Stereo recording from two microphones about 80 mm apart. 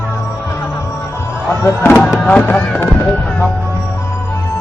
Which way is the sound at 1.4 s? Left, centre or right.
Left.